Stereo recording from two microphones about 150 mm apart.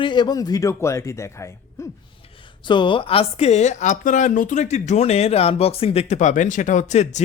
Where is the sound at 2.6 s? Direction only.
30° left (ahead or behind).